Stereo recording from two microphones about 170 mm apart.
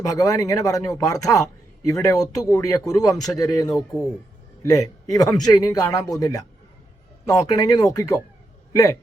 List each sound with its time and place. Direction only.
0.1 s speech: 20° left (ahead or behind)